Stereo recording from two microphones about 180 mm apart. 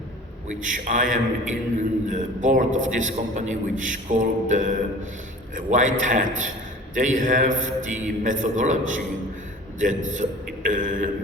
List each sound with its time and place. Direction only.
0.6 s a man's voice: 45° right (ahead or behind)